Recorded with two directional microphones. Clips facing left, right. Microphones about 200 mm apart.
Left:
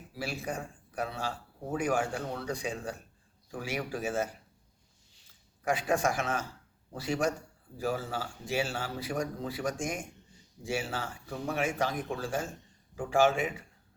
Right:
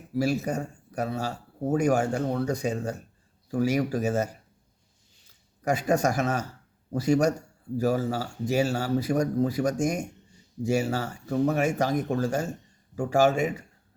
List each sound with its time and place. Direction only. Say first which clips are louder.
0.1 s speech: right 10 dB; 40° right (ahead or behind)
5.6 s speech: right 5 dB; 40° right (ahead or behind)